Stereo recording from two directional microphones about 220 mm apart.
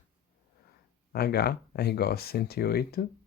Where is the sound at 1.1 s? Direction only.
45° left (ahead or behind).